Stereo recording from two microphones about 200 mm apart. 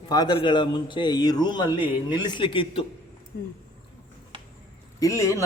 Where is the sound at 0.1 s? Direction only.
20° left (ahead or behind).